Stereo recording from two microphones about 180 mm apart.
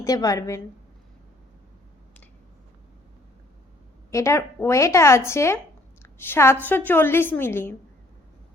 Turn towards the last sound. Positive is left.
turn(degrees=10)  # may be behind; listen again after turning